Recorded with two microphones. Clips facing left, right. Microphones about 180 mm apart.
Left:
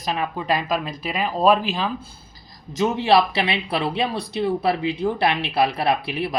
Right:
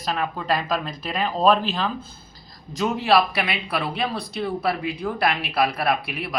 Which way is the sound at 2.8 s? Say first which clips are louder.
Left 2 dB; 25° left (ahead or behind).